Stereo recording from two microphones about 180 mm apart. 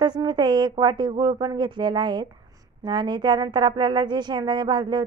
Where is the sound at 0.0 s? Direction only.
20° right (ahead or behind).